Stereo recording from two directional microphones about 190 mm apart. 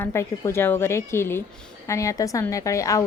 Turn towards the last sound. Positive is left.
turn(degrees=15)  # may be behind; listen again after turning